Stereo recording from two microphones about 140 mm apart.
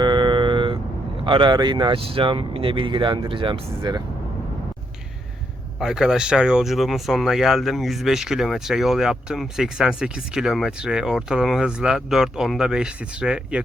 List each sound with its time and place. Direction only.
0.0 s vehicle: 35° right (ahead or behind)
1.2 s speech: 35° right (ahead or behind)
5.8 s speech: 5° right (ahead or behind)